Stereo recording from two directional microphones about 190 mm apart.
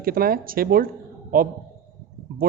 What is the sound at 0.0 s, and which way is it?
A man's voice, 50° right (ahead or behind).